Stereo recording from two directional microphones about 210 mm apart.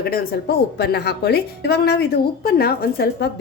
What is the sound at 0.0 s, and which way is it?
A woman's voice, 45° left (ahead or behind).